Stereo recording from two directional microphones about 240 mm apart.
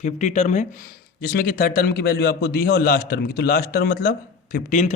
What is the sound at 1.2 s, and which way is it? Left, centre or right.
A man's voice, left.